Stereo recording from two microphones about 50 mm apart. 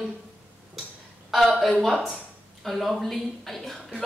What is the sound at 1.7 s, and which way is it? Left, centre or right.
Speech, centre.